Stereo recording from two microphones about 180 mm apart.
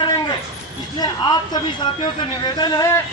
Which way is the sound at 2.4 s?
25° left (ahead or behind).